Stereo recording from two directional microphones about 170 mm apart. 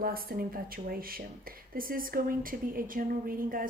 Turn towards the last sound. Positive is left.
turn(degrees=-55)  # may be behind; listen again after turning